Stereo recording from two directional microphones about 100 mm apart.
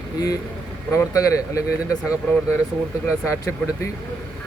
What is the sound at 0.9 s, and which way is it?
Speech, 35° left (ahead or behind).